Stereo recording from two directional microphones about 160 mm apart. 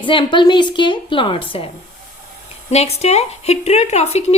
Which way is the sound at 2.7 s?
40° left (ahead or behind).